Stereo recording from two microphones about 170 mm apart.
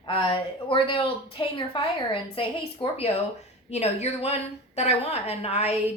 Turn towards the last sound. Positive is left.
turn(degrees=40)  # may be behind; listen again after turning